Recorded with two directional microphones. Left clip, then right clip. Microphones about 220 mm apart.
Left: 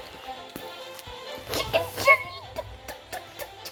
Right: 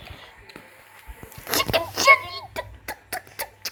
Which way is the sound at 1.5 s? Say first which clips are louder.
Right 3 dB; 25° right (ahead or behind).